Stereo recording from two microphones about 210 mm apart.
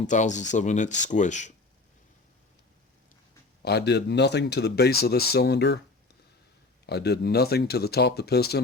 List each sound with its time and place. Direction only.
0.1 s speech: 35° left (ahead or behind)
3.6 s speech: 50° left (ahead or behind)
6.8 s speech: 50° left (ahead or behind)